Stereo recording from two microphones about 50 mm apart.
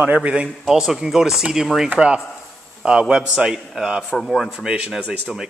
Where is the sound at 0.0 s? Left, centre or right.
Right.